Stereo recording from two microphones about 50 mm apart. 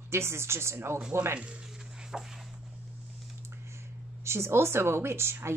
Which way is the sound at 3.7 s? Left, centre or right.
Right.